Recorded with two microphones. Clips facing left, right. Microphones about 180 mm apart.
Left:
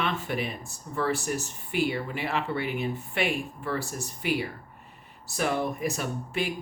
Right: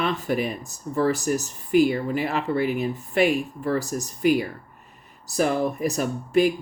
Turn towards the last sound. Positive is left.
turn(degrees=-40)  # may be behind; listen again after turning